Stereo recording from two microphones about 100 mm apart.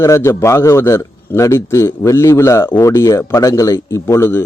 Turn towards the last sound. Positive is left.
turn(degrees=25)  # may be behind; listen again after turning